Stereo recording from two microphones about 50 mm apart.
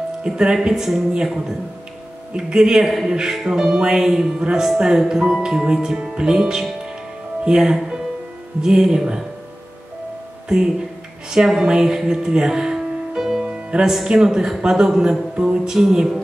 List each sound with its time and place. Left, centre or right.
0.2 s speech: centre
11.2 s speech: centre
13.5 s music: centre
14.0 s speech: centre